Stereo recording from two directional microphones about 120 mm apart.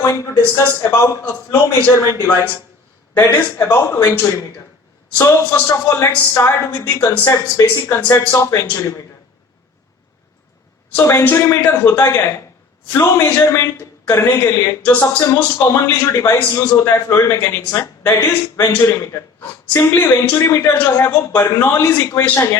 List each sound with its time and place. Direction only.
0.0 s a man's voice: 25° left (ahead or behind)
10.9 s a man's voice: 20° left (ahead or behind)